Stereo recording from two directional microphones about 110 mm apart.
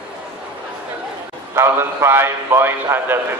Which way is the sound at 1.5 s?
25° right (ahead or behind).